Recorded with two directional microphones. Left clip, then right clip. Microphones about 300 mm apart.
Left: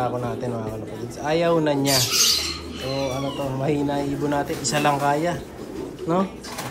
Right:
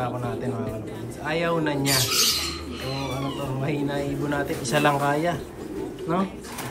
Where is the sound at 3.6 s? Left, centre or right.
Centre.